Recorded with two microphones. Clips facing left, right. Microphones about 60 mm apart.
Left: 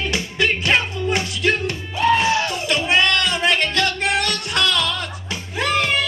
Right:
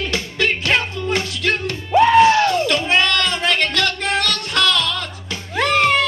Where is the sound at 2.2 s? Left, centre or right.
Right.